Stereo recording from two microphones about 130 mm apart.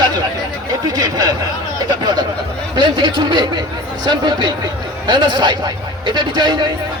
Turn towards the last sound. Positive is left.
turn(degrees=-35)  # may be behind; listen again after turning